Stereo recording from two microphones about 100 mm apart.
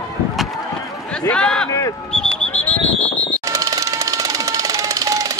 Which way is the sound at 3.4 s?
35° right (ahead or behind).